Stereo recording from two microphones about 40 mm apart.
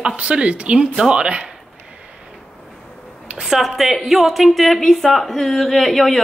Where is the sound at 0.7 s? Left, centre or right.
Centre.